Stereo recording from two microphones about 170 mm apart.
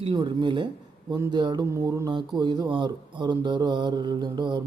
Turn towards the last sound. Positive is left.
turn(degrees=-25)  # may be behind; listen again after turning